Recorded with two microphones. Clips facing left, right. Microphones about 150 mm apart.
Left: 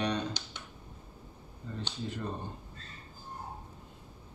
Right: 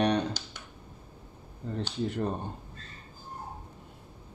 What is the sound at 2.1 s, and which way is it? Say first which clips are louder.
Speech: right 5 dB; 55° right (ahead or behind).